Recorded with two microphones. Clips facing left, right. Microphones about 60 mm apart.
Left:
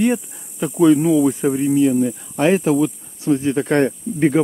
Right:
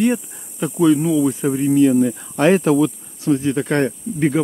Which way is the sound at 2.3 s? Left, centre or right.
Centre.